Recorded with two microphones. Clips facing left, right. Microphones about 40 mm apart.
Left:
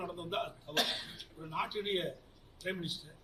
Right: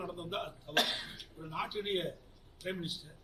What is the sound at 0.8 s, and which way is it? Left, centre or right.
Speech, right.